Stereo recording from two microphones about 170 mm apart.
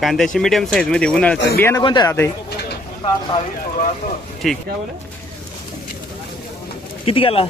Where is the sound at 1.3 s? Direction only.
85° left.